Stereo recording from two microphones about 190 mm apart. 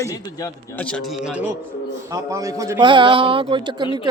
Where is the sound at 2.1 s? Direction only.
15° right (ahead or behind).